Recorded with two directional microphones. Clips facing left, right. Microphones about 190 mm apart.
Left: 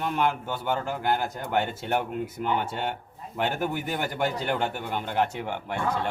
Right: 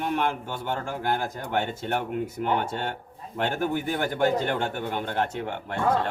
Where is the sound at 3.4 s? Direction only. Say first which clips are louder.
Right 1 dB; 5° left (ahead or behind).